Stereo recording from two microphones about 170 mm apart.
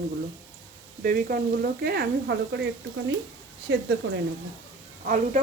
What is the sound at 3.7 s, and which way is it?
Frying, 90° right.